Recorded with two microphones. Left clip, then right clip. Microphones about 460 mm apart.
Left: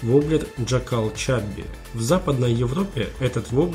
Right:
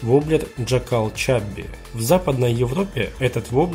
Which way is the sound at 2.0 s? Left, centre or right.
Centre.